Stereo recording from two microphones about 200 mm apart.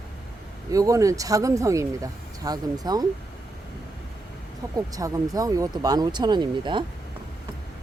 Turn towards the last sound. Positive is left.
turn(degrees=-25)  # may be behind; listen again after turning